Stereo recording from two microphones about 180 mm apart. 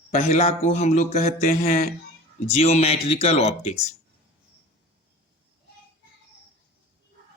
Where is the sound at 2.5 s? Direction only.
35° left (ahead or behind).